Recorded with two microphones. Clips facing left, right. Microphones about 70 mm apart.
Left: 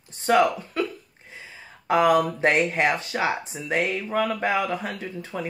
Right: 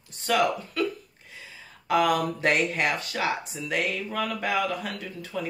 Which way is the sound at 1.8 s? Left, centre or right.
Left.